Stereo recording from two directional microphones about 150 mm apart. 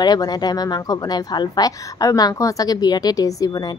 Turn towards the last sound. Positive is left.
turn(degrees=25)  # may be behind; listen again after turning